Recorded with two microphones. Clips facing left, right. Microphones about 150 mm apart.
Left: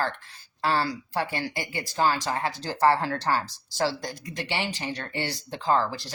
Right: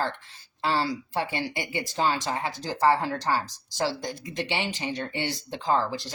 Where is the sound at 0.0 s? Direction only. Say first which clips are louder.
Even; 20° right (ahead or behind).